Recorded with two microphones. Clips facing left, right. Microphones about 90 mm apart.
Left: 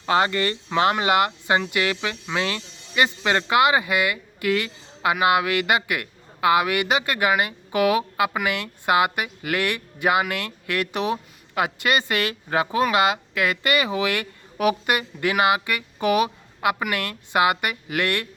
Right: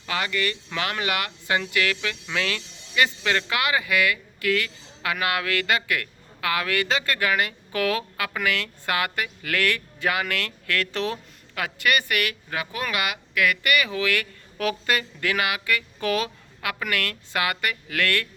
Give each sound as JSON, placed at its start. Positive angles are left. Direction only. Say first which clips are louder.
{"t": 0.0, "sound": "speech", "louder": "left 6 dB", "side_deg": 30}
{"t": 16.6, "sound": "a woman's voice", "louder": "left 4 dB", "side_deg": 30}